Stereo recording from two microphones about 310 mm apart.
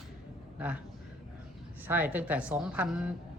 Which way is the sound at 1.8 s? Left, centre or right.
Centre.